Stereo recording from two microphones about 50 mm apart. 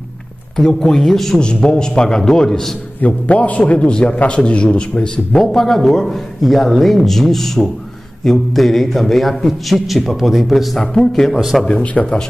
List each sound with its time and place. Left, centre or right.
0.8 s a man's voice: centre
1.4 s a man's voice: centre
3.0 s a man's voice: left
5.4 s a man's voice: centre
10.8 s a man's voice: centre
11.3 s a man's voice: centre
11.6 s a man's voice: left